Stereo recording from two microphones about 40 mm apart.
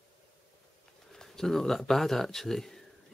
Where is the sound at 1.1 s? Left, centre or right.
Centre.